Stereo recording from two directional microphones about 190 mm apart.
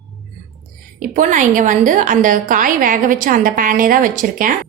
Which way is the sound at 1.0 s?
45° right (ahead or behind).